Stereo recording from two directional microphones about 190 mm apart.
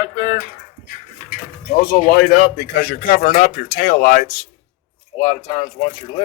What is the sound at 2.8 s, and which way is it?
Speech, 50° left (ahead or behind).